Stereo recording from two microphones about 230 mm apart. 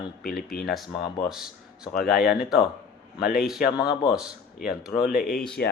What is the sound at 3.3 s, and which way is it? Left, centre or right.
Speech, centre.